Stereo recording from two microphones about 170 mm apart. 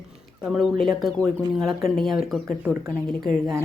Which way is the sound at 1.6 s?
Centre (ahead or behind).